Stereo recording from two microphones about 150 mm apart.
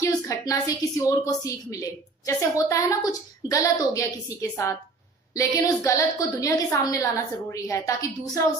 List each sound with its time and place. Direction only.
0.0 s a woman's voice: 20° left (ahead or behind)